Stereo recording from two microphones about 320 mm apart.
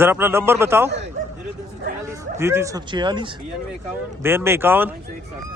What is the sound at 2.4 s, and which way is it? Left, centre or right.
Speech, centre.